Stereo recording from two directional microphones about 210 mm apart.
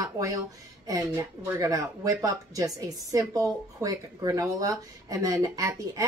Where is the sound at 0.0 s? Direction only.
15° right (ahead or behind).